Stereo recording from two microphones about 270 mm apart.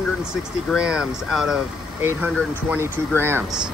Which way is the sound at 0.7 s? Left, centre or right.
Centre.